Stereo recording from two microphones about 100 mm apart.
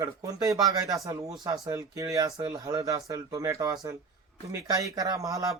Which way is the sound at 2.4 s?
45° right (ahead or behind).